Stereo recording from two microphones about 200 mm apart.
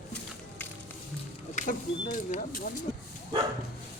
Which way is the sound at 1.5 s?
40° left (ahead or behind).